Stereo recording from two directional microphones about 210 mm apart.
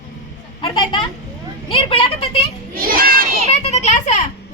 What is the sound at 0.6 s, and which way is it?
A woman's voice, 25° left (ahead or behind).